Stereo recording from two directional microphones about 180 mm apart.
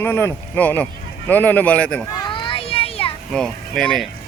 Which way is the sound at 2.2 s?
25° left (ahead or behind).